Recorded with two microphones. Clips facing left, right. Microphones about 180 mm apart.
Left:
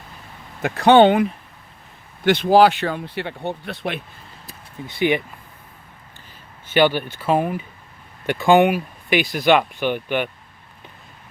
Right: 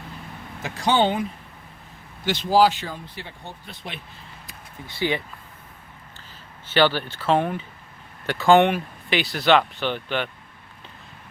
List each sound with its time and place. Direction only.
0.6 s speech: 60° left (ahead or behind)
4.9 s speech: 20° left (ahead or behind)
6.7 s speech: 10° left (ahead or behind)
8.5 s speech: 5° left (ahead or behind)